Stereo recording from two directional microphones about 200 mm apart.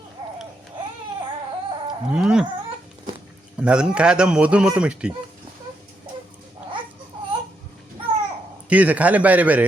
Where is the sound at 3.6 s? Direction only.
5° right (ahead or behind).